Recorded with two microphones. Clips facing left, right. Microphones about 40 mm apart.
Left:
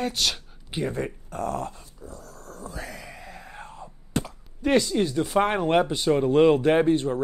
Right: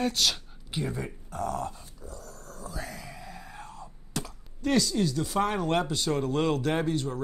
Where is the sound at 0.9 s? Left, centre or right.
Left.